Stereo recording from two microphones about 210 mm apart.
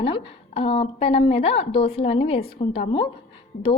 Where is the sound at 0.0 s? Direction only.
25° left (ahead or behind).